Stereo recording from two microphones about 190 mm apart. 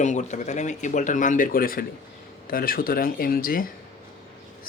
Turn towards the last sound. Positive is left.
turn(degrees=50)  # may be behind; listen again after turning